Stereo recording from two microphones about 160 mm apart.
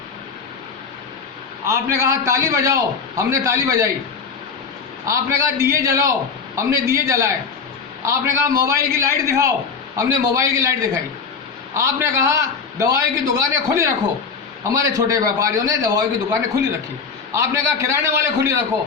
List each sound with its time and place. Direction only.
1.6 s a man's voice: 20° right (ahead or behind)
5.0 s a man's voice: 20° right (ahead or behind)